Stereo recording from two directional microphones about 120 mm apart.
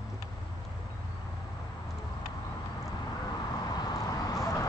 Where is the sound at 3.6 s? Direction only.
35° left (ahead or behind).